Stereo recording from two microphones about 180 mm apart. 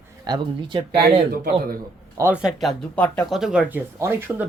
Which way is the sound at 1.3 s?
55° right (ahead or behind).